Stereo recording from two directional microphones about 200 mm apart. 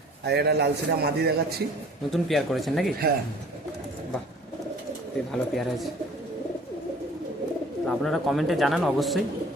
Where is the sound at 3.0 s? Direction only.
50° right (ahead or behind).